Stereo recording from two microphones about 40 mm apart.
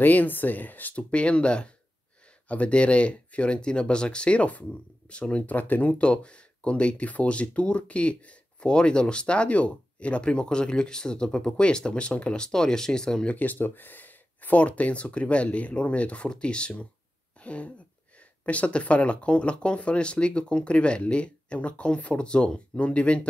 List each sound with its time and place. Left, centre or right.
0.0 s speech: left
0.9 s speech: left
5.3 s speech: left
12.4 s speech: centre
13.3 s speech: left
14.6 s speech: left
17.4 s a sound: left
18.4 s speech: left